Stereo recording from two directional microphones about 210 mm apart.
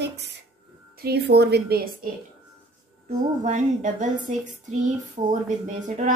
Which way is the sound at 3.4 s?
35° right (ahead or behind).